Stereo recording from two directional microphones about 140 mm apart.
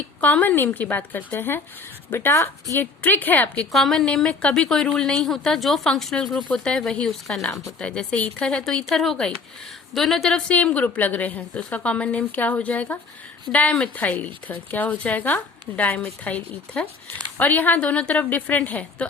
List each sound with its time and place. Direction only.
0.2 s a woman's voice: 10° left (ahead or behind)
3.7 s a woman's voice: centre (ahead or behind)